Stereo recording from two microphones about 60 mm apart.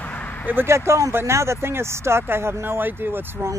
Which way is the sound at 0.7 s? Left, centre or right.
Right.